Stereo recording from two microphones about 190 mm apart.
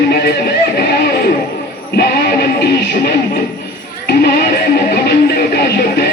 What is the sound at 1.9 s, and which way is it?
Music, 55° left (ahead or behind).